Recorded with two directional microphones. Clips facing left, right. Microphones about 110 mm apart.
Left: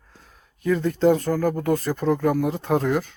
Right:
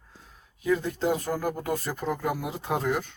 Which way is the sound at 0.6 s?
5° right (ahead or behind).